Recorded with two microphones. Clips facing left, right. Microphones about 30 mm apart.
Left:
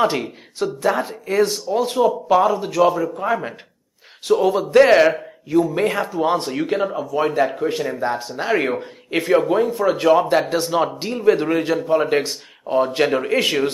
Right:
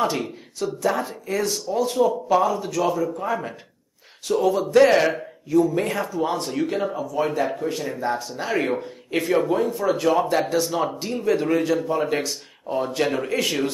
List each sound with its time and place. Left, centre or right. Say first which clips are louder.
0.6 s a man's voice: left 3 dB; left
8.3 s a man's voice: left 4 dB; left